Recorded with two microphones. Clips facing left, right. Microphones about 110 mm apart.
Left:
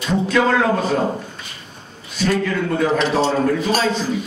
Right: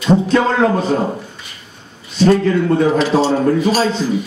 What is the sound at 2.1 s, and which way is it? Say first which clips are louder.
A man's voice: right 7 dB; 30° right (ahead or behind).